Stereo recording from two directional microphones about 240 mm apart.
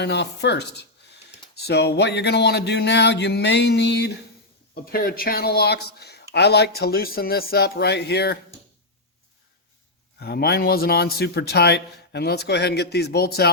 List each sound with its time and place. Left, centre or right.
0.0 s a man's voice: left
10.2 s a man's voice: left